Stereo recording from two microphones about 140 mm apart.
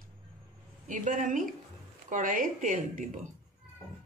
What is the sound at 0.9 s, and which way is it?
Speech, 65° right (ahead or behind).